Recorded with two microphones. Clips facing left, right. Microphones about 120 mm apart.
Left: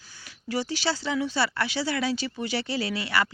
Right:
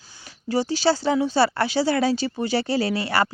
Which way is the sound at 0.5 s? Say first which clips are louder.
Right 7 dB; 30° right (ahead or behind).